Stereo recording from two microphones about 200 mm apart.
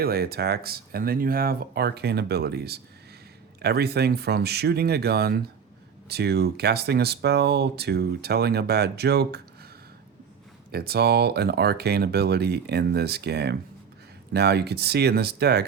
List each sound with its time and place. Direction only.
0.0 s speech: 50° right (ahead or behind)
10.7 s speech: 50° right (ahead or behind)